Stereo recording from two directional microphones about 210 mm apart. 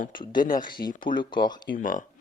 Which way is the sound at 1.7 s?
40° left (ahead or behind).